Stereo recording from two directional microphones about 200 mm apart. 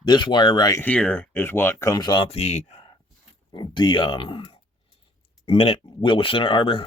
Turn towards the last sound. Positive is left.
turn(degrees=25)  # may be behind; listen again after turning